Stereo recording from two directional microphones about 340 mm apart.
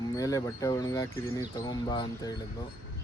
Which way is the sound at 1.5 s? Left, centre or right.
Centre.